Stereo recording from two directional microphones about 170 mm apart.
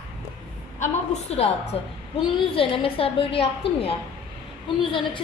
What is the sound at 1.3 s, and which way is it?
A woman's voice, 40° left (ahead or behind).